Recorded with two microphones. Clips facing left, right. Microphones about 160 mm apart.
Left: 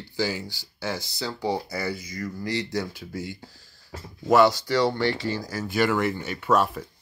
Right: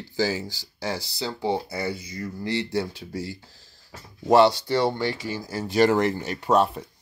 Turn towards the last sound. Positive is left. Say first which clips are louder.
# right 2 dB
turn(degrees=-30)  # may be behind; listen again after turning